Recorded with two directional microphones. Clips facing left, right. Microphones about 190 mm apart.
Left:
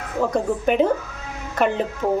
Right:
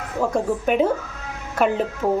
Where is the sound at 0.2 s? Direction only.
Centre (ahead or behind).